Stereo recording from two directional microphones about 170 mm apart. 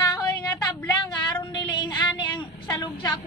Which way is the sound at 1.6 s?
25° left (ahead or behind).